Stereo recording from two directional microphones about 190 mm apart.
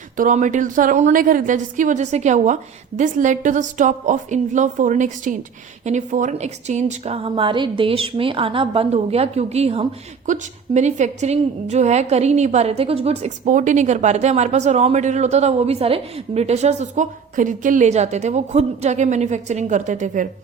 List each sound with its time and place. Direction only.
0.2 s a woman's voice: 40° right (ahead or behind)